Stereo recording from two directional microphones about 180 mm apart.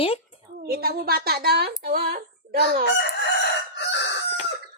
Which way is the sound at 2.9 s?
75° left (ahead or behind).